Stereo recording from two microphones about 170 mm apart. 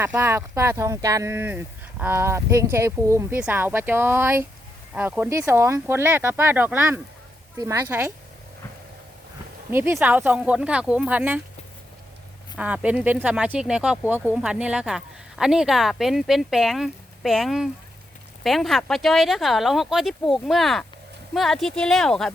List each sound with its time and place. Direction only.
0.0 s speech: 15° right (ahead or behind)
9.7 s speech: 15° right (ahead or behind)
12.5 s speech: 10° right (ahead or behind)